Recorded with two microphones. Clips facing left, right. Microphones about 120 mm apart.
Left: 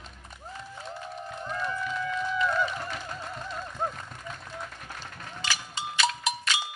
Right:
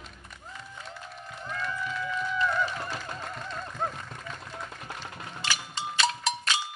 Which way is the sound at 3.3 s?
10° left (ahead or behind).